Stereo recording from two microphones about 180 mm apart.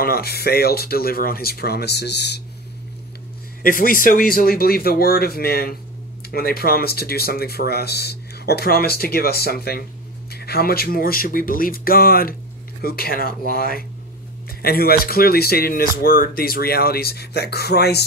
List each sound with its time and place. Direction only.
0.0 s speech: 60° left (ahead or behind)
3.6 s speech: 50° left (ahead or behind)